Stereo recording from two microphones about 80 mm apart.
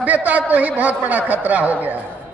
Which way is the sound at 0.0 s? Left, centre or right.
Centre.